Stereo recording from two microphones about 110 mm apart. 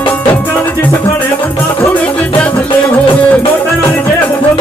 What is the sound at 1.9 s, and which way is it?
Music, 15° left (ahead or behind).